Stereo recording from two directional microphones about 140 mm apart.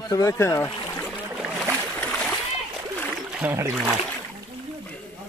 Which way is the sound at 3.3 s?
5° right (ahead or behind).